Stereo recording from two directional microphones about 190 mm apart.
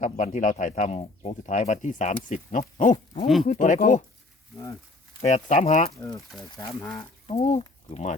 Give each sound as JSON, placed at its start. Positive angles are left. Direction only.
{"t": 0.0, "sound": "speech", "side_deg": 40}
{"t": 5.2, "sound": "speech", "side_deg": 40}
{"t": 6.0, "sound": "speech", "side_deg": 20}
{"t": 6.7, "sound": "speech", "side_deg": 10}
{"t": 7.3, "sound": "speech", "side_deg": 35}